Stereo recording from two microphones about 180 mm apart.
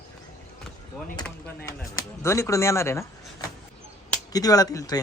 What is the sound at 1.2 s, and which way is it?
Speech, 10° left (ahead or behind).